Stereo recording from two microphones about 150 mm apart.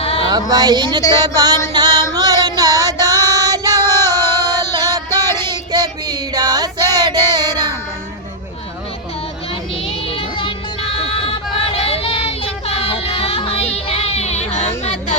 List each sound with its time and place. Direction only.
0.0 s a sound: 40° left (ahead or behind)
0.5 s a woman's voice: 25° right (ahead or behind)
1.7 s music: 30° right (ahead or behind)
3.2 s female singing: 25° right (ahead or behind)
3.9 s music: 15° left (ahead or behind)
4.9 s music: 25° right (ahead or behind)
5.4 s child singing: 30° right (ahead or behind)
9.8 s child singing: 35° left (ahead or behind)
14.8 s music: 45° left (ahead or behind)